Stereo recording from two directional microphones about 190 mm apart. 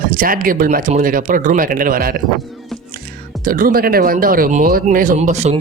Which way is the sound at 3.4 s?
45° right (ahead or behind).